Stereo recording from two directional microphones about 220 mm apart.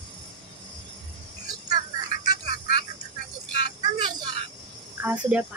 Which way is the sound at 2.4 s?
45° left (ahead or behind).